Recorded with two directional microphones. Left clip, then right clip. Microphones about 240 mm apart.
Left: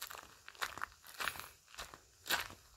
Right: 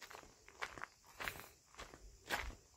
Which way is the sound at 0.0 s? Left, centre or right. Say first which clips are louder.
Left 6 dB; left.